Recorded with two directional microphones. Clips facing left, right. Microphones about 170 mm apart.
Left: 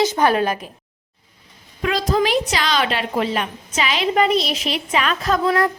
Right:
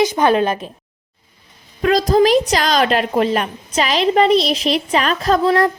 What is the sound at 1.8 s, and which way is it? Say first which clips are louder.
A woman's voice: right 6 dB; 40° right (ahead or behind).